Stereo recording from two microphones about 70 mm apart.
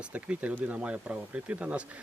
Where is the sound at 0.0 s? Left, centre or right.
Centre.